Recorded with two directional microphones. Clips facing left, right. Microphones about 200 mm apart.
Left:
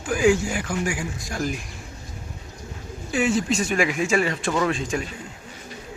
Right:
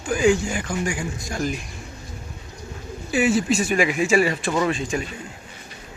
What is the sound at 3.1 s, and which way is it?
Speech, 5° right (ahead or behind).